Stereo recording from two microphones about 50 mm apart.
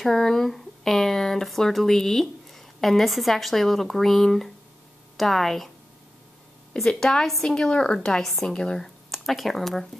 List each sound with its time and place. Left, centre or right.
0.0 s speech: centre
6.7 s a woman's voice: centre
8.2 s speech: centre